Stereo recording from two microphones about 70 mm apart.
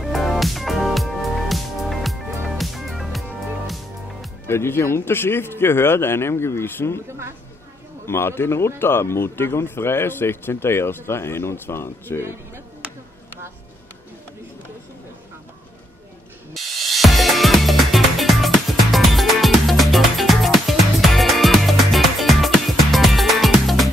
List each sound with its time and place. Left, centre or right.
0.0 s music: centre
4.5 s speech: left
8.1 s speech: left
16.5 s music: centre